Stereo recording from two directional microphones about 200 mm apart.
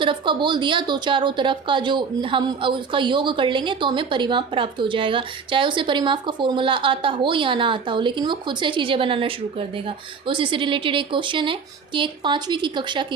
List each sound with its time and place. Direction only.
0.0 s a woman's voice: 25° right (ahead or behind)